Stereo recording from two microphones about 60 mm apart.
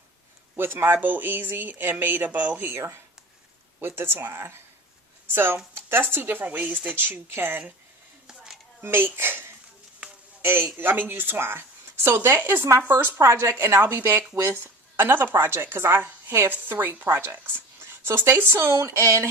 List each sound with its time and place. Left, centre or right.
0.5 s speech: right
3.8 s speech: right
8.8 s a man's voice: right
13.1 s speech: right